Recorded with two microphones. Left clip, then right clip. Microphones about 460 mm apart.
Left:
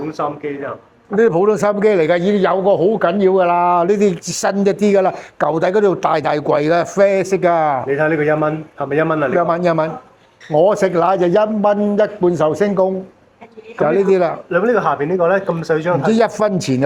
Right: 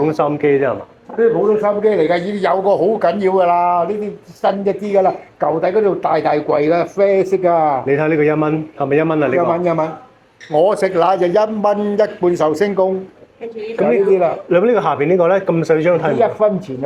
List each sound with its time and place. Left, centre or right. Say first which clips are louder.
0.1 s speech: right 7 dB; centre
1.2 s a man's voice: even; left
7.9 s a man's voice: right 1 dB; centre
9.5 s a man's voice: even; left
14.1 s speech: right 1 dB; left
14.5 s a man's voice: right 1 dB; centre
16.4 s speech: right 2 dB; left